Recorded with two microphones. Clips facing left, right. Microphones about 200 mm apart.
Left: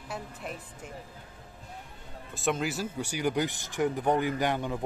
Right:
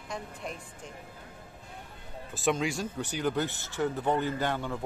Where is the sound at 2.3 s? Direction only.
Centre (ahead or behind); by 4.8 s 15° left (ahead or behind).